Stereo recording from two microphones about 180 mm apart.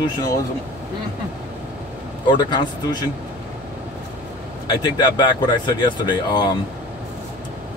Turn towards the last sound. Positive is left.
turn(degrees=25)  # may be behind; listen again after turning